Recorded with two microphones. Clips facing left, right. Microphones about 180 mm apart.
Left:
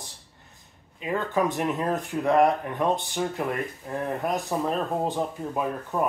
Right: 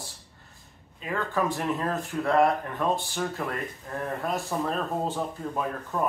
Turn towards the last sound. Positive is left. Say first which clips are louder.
# left 2 dB
turn(degrees=15)  # may be behind; listen again after turning